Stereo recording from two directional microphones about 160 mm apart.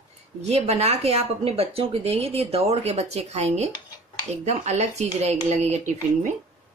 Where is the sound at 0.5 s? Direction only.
40° right (ahead or behind).